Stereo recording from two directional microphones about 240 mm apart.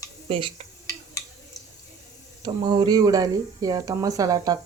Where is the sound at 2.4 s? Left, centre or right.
Centre.